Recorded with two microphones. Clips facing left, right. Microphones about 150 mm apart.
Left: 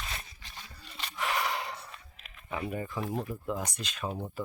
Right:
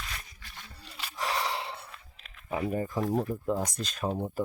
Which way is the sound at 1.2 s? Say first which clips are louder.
Even; 35° right (ahead or behind).